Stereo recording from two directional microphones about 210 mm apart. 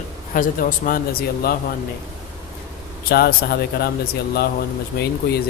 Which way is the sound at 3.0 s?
45° left (ahead or behind).